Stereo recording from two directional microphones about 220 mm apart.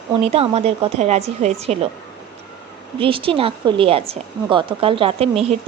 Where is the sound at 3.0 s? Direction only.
25° right (ahead or behind).